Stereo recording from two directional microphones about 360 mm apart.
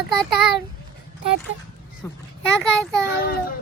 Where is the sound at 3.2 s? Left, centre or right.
Left.